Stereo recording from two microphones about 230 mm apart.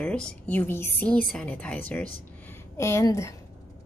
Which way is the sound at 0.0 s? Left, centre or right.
Centre.